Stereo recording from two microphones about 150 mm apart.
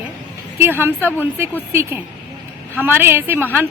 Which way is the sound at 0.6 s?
15° right (ahead or behind).